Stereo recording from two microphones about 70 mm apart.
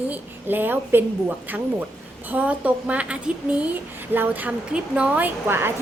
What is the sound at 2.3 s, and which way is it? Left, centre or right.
A woman's voice, right.